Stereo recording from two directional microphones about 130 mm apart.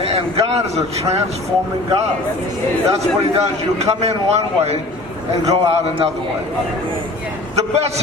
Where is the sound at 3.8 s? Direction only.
55° right (ahead or behind).